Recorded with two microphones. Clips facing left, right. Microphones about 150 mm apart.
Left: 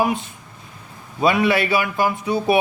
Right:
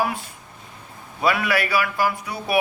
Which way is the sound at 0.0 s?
20° left (ahead or behind).